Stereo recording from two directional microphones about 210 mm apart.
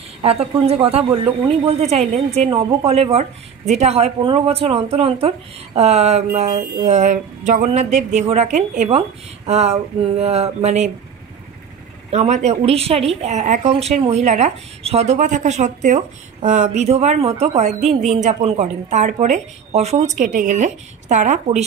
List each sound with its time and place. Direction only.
0.2 s a woman's voice: 30° right (ahead or behind)
12.1 s speech: 35° right (ahead or behind)